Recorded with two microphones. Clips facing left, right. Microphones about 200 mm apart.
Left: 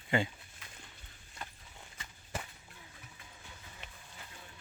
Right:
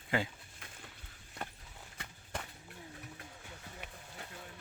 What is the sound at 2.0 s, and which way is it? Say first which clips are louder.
Walk: right 5 dB; 65° right (ahead or behind).